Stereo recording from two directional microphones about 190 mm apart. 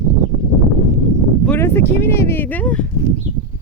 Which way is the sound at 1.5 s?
15° left (ahead or behind).